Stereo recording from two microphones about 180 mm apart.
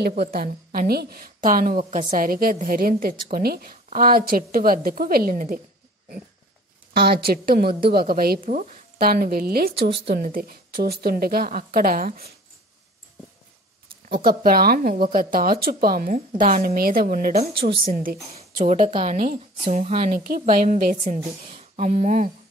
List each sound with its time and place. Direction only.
0.0 s a woman's voice: 60° right (ahead or behind)
6.9 s a woman's voice: 60° right (ahead or behind)
14.0 s a woman's voice: 55° right (ahead or behind)
18.3 s speech: 35° right (ahead or behind)
20.1 s a woman's voice: 50° right (ahead or behind)